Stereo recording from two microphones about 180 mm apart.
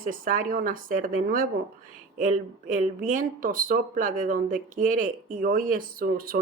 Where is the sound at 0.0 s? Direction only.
50° right (ahead or behind).